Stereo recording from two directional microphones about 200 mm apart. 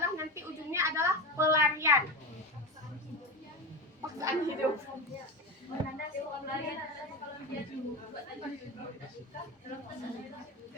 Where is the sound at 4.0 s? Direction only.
15° right (ahead or behind).